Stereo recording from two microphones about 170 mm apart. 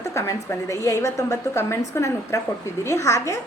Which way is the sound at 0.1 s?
20° left (ahead or behind).